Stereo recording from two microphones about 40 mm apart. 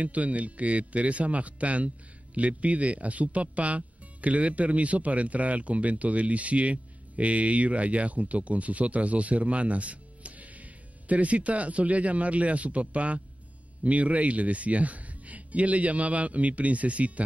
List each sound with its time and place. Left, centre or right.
0.0 s speech: right